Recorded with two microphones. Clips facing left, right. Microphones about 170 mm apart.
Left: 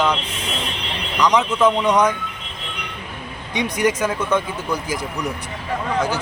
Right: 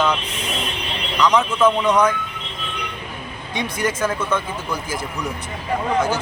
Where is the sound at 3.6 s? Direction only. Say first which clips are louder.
Left 3 dB; 15° left (ahead or behind).